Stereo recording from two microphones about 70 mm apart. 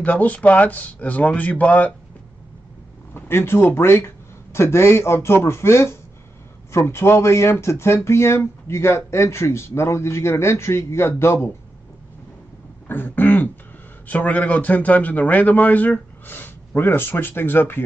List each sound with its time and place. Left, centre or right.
0.0 s a man's voice: left
3.2 s speech: left
12.8 s a man's voice: left